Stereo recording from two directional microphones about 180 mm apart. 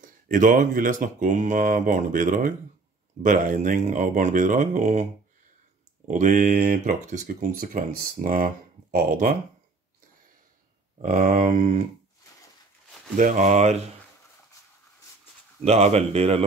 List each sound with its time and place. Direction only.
0.0 s speech: 45° right (ahead or behind)
6.0 s speech: 45° right (ahead or behind)
11.0 s speech: 50° right (ahead or behind)
13.1 s speech: 45° right (ahead or behind)
15.6 s speech: 35° right (ahead or behind)